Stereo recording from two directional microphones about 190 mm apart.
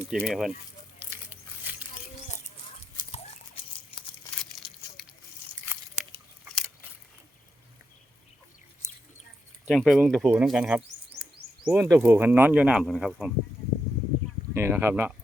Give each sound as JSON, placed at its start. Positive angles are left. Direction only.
{"t": 0.2, "sound": "speech", "side_deg": 5}
{"t": 1.7, "sound": "rodents", "side_deg": -10}
{"t": 3.1, "sound": "a sound", "side_deg": 30}
{"t": 4.4, "sound": "crumpling", "side_deg": 0}
{"t": 5.7, "sound": "biting", "side_deg": -15}
{"t": 6.4, "sound": "a sound", "side_deg": 0}
{"t": 9.6, "sound": "speech", "side_deg": 0}
{"t": 14.5, "sound": "speech", "side_deg": -10}